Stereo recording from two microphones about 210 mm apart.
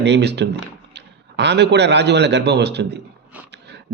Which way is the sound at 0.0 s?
55° right (ahead or behind).